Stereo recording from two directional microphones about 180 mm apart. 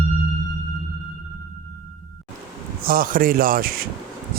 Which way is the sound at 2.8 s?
50° right (ahead or behind).